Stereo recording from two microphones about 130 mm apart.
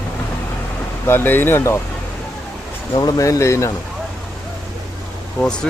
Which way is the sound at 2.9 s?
30° left (ahead or behind).